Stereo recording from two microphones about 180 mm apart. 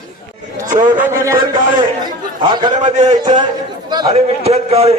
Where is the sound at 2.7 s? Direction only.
40° right (ahead or behind).